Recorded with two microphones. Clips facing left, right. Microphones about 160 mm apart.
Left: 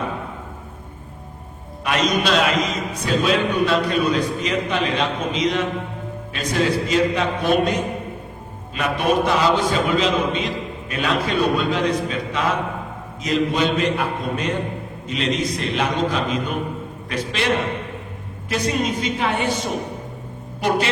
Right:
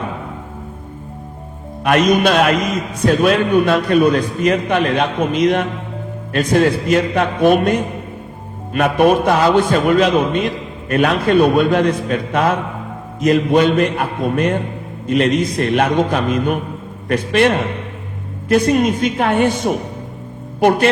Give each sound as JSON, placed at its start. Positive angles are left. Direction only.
{"t": 1.8, "sound": "a man's voice", "side_deg": -55}